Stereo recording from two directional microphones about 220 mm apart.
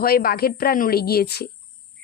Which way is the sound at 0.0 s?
45° left (ahead or behind).